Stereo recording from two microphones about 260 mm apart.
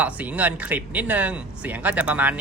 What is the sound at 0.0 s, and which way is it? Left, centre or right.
A woman's voice, centre.